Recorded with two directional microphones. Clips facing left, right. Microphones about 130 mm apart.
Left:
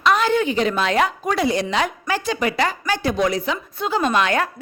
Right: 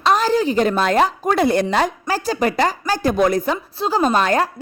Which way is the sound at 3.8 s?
35° right (ahead or behind).